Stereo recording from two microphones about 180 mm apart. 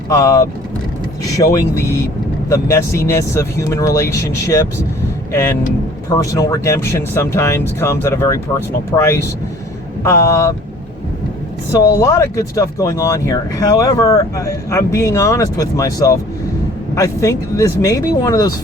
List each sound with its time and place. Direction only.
0.1 s speech: 20° left (ahead or behind)
11.7 s speech: 15° left (ahead or behind)